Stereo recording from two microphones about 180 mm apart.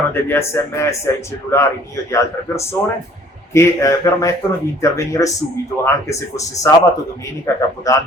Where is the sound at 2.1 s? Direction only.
15° left (ahead or behind).